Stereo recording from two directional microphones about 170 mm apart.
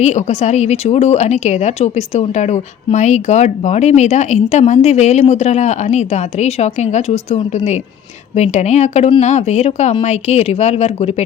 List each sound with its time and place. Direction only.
0.0 s speech: 40° left (ahead or behind)